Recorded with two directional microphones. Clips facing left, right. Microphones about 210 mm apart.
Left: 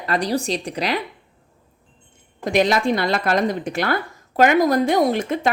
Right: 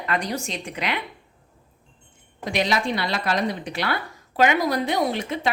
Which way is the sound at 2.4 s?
50° left (ahead or behind).